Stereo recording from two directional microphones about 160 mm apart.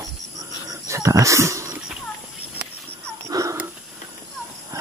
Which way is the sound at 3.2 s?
20° right (ahead or behind).